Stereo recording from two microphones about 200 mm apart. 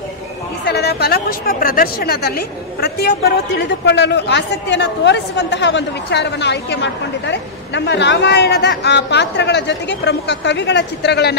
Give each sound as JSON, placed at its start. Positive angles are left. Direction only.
{"t": 0.7, "sound": "a woman's voice", "side_deg": 55}